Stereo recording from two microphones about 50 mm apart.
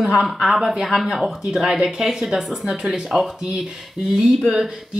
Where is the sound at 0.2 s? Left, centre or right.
Centre.